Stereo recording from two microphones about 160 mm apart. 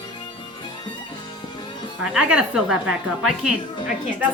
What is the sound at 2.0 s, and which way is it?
A woman's voice, 5° right (ahead or behind).